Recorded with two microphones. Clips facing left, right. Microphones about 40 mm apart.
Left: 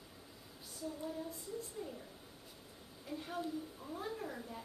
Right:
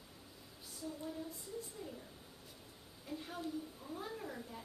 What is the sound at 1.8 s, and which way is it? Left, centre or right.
Speech, centre.